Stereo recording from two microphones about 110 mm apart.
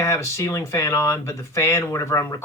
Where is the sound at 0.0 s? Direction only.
25° left (ahead or behind).